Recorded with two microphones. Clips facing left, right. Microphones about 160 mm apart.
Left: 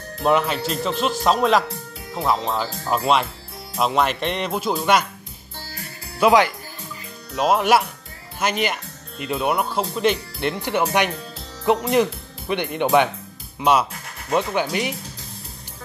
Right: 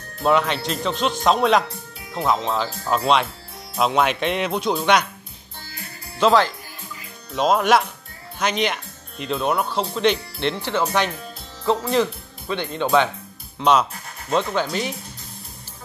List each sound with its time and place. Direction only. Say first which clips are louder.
0.2 s speech: even; 5° left (ahead or behind)
6.1 s speech: left 1 dB; 10° left (ahead or behind)